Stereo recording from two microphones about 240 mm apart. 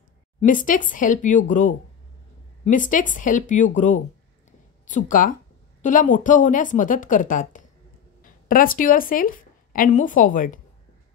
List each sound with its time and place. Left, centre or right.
0.4 s a woman's voice: left
4.5 s a sound: left
5.8 s a woman's voice: left